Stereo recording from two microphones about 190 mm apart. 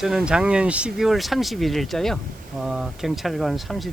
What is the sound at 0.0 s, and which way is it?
Speech, centre (ahead or behind).